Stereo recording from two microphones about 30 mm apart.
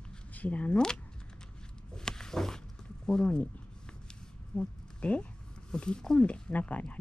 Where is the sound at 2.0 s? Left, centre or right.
Left.